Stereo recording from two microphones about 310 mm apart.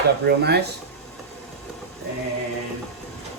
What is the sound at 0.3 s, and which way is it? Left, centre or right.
Speech, right.